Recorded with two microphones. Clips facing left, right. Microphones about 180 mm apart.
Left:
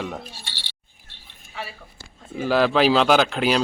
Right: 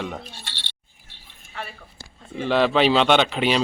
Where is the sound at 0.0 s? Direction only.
5° left (ahead or behind).